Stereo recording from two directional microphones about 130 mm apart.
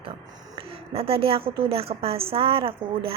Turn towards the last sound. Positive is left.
turn(degrees=-45)  # may be behind; listen again after turning